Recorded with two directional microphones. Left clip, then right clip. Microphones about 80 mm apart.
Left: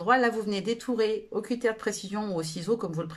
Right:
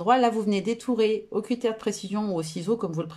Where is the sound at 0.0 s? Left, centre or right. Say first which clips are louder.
Right 3 dB; right.